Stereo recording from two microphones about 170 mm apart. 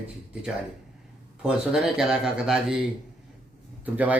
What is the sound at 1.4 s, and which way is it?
Speech, 5° right (ahead or behind).